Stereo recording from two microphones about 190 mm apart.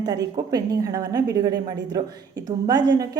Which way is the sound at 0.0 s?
20° right (ahead or behind).